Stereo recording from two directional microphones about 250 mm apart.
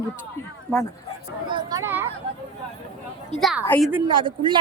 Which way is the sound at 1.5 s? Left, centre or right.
Centre.